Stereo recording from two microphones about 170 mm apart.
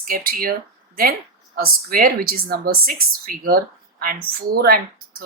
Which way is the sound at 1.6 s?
60° right (ahead or behind).